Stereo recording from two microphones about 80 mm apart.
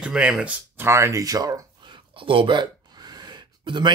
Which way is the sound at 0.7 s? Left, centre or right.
Right.